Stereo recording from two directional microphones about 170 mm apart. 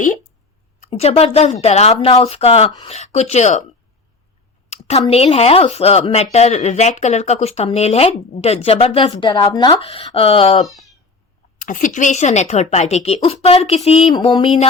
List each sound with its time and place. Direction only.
0.8 s a woman's voice: 35° left (ahead or behind)
4.7 s speech: 40° left (ahead or behind)
10.7 s speech: centre (ahead or behind)
11.6 s speech: 50° left (ahead or behind); by 14.7 s 30° left (ahead or behind)